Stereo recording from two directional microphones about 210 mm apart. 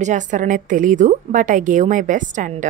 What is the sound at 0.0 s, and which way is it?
A woman's voice, 35° right (ahead or behind).